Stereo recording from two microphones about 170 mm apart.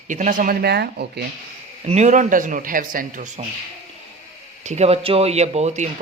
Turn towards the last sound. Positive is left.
turn(degrees=-40)  # may be behind; listen again after turning